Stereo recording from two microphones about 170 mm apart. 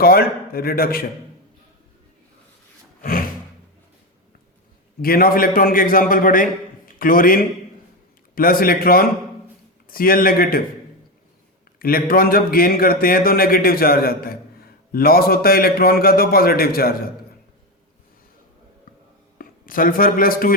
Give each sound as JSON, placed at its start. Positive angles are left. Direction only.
{"t": 0.0, "sound": "speech", "side_deg": 60}
{"t": 3.0, "sound": "a sound", "side_deg": 55}
{"t": 5.0, "sound": "speech", "side_deg": 60}
{"t": 11.8, "sound": "speech", "side_deg": 60}
{"t": 19.4, "sound": "speech", "side_deg": 55}